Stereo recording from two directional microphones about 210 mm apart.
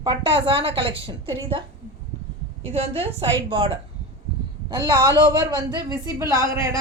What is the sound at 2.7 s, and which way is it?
A woman's voice, 30° right (ahead or behind).